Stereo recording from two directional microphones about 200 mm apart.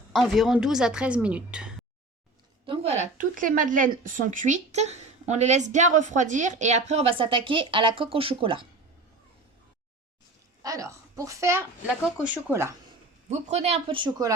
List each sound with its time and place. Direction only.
0.1 s a woman's voice: centre (ahead or behind)
2.6 s a woman's voice: 30° right (ahead or behind)
10.6 s a woman's voice: 15° right (ahead or behind)
13.2 s speech: 35° right (ahead or behind)